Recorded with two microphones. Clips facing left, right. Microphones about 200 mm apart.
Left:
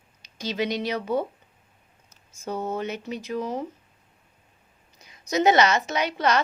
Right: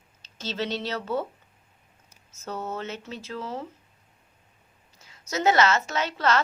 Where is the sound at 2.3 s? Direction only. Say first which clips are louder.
Left 4 dB; 15° left (ahead or behind).